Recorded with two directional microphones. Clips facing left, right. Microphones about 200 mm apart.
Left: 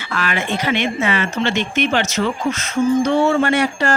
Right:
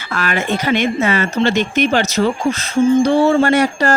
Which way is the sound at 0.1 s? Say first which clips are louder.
Right 3 dB; 45° right (ahead or behind).